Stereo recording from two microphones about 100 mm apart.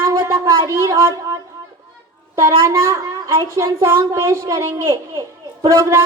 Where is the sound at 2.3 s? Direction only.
30° right (ahead or behind).